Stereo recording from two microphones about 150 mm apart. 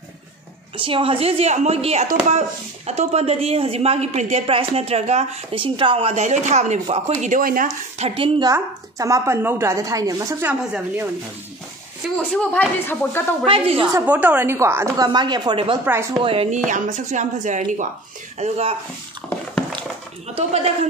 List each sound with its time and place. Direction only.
0.7 s a woman's voice: 35° right (ahead or behind); by 7.7 s 65° right (ahead or behind)
8.0 s a woman's voice: 35° right (ahead or behind)
8.5 s a woman's voice: 20° right (ahead or behind)
12.2 s a woman's voice: 10° left (ahead or behind)
13.5 s a woman's voice: 40° right (ahead or behind)
14.0 s speech: 10° right (ahead or behind)
15.0 s a woman's voice: 30° right (ahead or behind)
15.8 s speech: 15° right (ahead or behind)
16.2 s a woman's voice: 40° right (ahead or behind)
16.5 s speech: 55° right (ahead or behind)
18.4 s speech: 40° right (ahead or behind)
20.3 s speech: 45° right (ahead or behind)